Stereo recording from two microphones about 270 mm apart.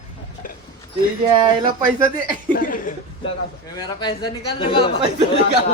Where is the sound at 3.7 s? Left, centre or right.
Centre.